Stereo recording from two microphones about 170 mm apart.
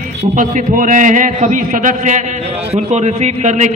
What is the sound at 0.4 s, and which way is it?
A man's voice, 50° right (ahead or behind).